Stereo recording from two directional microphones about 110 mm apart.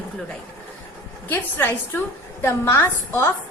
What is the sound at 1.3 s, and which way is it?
A woman's voice, 20° left (ahead or behind).